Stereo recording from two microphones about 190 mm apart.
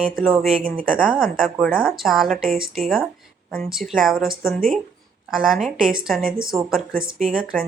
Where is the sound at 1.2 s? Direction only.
45° right (ahead or behind).